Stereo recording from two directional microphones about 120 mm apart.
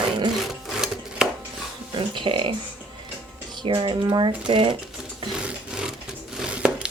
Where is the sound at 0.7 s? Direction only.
5° right (ahead or behind).